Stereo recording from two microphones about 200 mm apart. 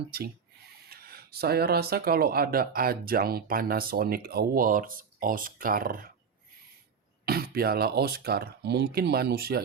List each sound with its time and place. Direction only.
0.1 s speech: 50° right (ahead or behind)
7.3 s speech: 50° right (ahead or behind)